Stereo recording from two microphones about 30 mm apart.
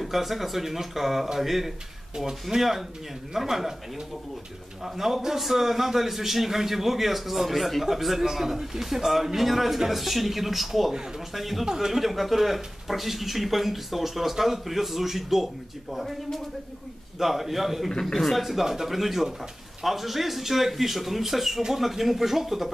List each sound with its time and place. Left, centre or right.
0.0 s a man's voice: centre
4.8 s a man's voice: centre
11.6 s a man's voice: centre
11.9 s speech: centre
17.2 s a man's voice: centre